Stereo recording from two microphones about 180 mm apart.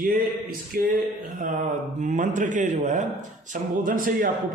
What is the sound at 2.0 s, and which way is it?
A man's voice, 45° right (ahead or behind).